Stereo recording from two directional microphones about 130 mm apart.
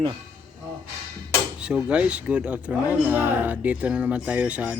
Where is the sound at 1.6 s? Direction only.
10° right (ahead or behind).